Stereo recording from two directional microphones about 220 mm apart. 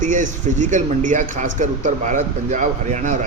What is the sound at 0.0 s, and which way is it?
A man's voice, 35° right (ahead or behind).